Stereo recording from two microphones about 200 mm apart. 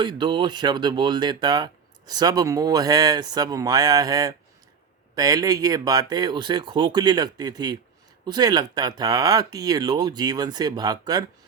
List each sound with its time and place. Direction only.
0.0 s speech: 20° right (ahead or behind)